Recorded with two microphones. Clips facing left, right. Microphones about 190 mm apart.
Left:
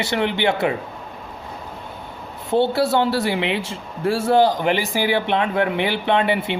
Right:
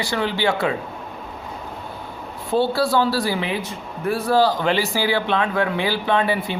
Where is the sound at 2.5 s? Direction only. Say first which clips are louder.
Left 1 dB; 20° left (ahead or behind).